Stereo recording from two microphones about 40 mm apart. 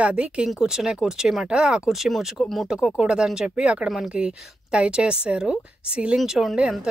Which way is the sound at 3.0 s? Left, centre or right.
Centre.